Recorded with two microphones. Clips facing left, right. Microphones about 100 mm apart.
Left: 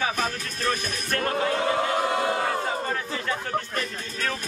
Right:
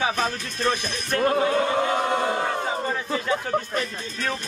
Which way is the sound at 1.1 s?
15° right (ahead or behind).